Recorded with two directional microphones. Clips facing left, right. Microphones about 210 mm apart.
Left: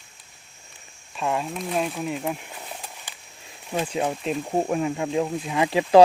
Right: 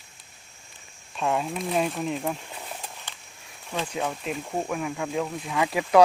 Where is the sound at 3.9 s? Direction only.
30° left (ahead or behind).